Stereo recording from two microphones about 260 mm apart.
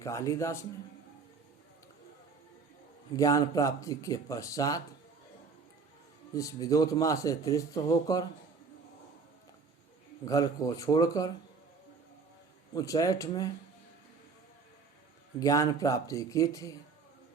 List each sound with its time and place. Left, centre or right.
0.0 s a man's voice: centre
3.2 s a man's voice: centre
6.3 s a man's voice: centre
10.2 s a man's voice: centre
12.7 s a man's voice: centre
15.4 s a man's voice: centre